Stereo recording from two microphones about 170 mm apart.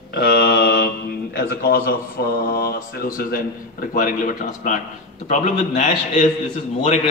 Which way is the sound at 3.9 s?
50° left (ahead or behind).